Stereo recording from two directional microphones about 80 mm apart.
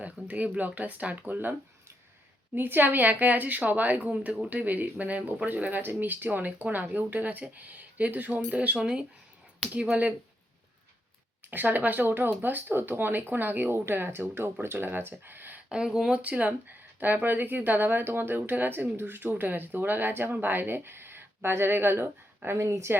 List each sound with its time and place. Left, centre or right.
0.0 s a woman's voice: centre
2.6 s a woman's voice: right
11.5 s a woman's voice: right
15.2 s a sound: right
15.7 s speech: centre
16.2 s a woman's voice: centre; by 23.0 s right